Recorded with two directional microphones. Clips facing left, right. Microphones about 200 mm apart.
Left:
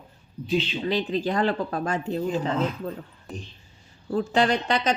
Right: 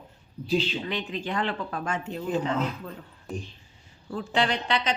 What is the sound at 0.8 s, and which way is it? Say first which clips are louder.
Speech: left 7 dB; 35° left (ahead or behind).